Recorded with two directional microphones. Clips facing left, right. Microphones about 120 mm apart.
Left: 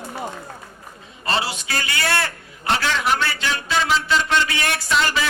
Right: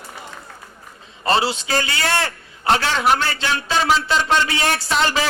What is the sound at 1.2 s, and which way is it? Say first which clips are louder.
A man's voice: right 5 dB; 30° right (ahead or behind).